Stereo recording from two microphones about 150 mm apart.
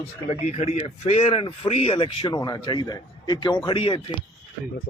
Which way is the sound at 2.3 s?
25° left (ahead or behind).